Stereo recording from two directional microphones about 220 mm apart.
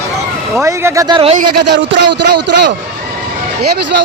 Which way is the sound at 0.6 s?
15° right (ahead or behind).